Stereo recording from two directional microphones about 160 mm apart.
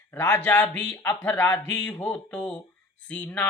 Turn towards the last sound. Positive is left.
turn(degrees=10)  # may be behind; listen again after turning